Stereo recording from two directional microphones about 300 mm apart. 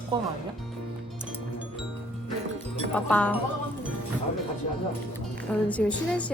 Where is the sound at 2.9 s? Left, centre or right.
Centre.